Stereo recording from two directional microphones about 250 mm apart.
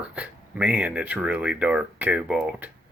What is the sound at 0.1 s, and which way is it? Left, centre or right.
Speech, centre.